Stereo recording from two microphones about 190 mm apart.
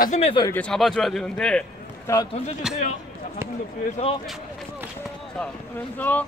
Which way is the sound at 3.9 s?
30° left (ahead or behind).